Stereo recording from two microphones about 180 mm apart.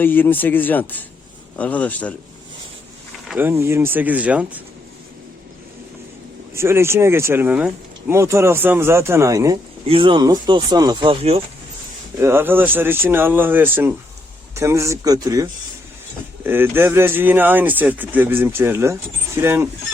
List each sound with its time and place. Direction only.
0.0 s speech: 10° left (ahead or behind)
3.2 s speech: 10° right (ahead or behind)
6.5 s speech: 15° right (ahead or behind)
9.8 s speech: 30° right (ahead or behind)
12.2 s speech: 15° right (ahead or behind)